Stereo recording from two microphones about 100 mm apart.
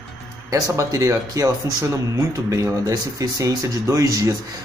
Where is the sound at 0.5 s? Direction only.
35° right (ahead or behind).